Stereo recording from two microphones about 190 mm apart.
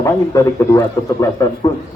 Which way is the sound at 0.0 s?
15° left (ahead or behind).